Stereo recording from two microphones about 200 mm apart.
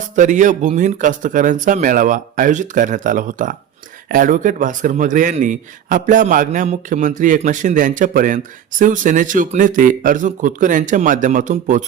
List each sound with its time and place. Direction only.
0.2 s a man's voice: 40° right (ahead or behind)